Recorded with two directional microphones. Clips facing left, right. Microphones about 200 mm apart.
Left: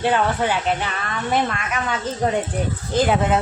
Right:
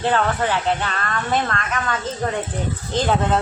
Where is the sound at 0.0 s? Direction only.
15° left (ahead or behind).